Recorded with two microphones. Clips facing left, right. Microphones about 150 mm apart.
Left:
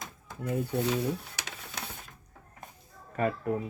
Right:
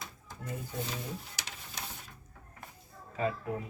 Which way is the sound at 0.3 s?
65° left (ahead or behind).